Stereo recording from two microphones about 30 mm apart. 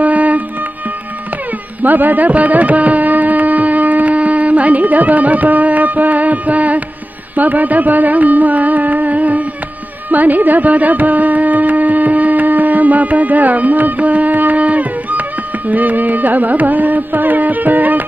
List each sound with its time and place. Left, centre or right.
0.0 s music: right
1.8 s music: right
7.3 s music: right
10.0 s carnatic music: right
14.6 s music: right